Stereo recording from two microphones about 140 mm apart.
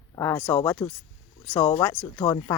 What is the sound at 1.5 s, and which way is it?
Speech, 5° left (ahead or behind).